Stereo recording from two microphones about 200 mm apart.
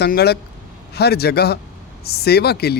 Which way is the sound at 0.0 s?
55° left (ahead or behind).